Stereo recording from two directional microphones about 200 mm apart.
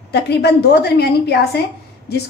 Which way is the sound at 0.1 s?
55° left (ahead or behind).